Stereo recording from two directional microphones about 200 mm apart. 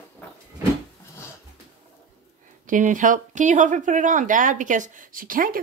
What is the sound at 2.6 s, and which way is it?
Speech, 40° right (ahead or behind).